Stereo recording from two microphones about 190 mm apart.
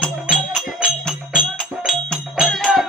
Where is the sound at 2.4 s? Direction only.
Centre (ahead or behind).